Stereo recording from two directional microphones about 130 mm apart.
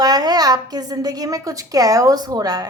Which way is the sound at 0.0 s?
30° right (ahead or behind).